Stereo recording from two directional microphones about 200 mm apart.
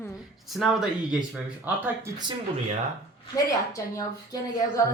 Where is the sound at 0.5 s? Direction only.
Centre (ahead or behind).